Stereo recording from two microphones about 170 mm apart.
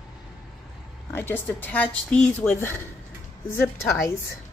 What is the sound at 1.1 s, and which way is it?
Speech, 15° left (ahead or behind).